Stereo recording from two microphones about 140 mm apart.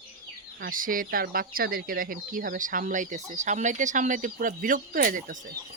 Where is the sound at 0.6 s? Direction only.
80° right.